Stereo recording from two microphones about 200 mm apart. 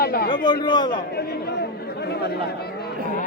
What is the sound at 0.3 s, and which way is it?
Speech, 20° left (ahead or behind).